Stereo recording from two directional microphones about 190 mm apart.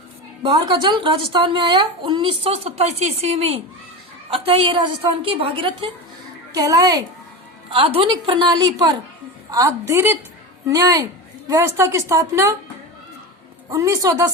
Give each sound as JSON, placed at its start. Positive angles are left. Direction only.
{"t": 0.4, "sound": "a woman's voice", "side_deg": -20}
{"t": 7.7, "sound": "a woman's voice", "side_deg": -30}
{"t": 13.7, "sound": "a woman's voice", "side_deg": -15}